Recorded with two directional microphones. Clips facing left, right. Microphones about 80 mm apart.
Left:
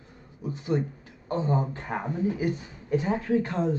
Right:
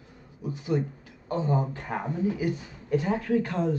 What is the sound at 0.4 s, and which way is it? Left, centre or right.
Speech, left.